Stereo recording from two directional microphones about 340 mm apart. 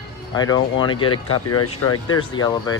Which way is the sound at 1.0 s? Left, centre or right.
Left.